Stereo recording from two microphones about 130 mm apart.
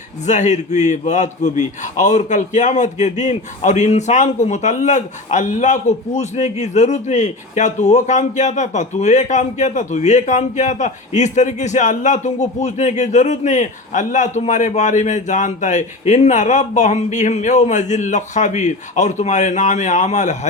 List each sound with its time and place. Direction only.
0.3 s a man's voice: 65° left (ahead or behind)